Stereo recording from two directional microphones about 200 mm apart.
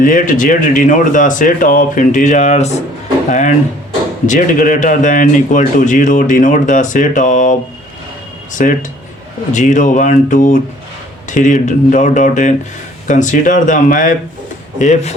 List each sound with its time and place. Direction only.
0.0 s a man's voice: 40° left (ahead or behind)
8.6 s a man's voice: 40° left (ahead or behind)